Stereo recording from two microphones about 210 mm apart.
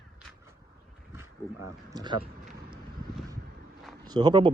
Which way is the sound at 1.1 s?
15° right (ahead or behind).